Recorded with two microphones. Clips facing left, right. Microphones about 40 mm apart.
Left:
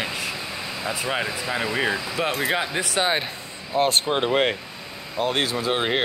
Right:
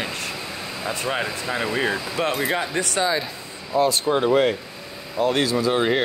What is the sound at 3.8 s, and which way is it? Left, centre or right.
Speech, left.